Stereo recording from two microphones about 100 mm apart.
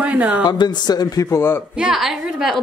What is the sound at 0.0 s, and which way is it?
Speech, 15° right (ahead or behind).